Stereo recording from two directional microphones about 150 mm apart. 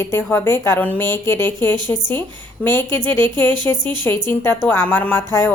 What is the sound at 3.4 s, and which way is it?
Speech, 30° right (ahead or behind).